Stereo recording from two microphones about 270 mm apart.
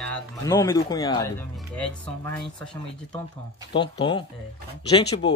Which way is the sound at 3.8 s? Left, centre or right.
Centre.